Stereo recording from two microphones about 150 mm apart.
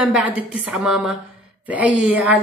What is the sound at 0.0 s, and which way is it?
A woman's voice, 5° right (ahead or behind).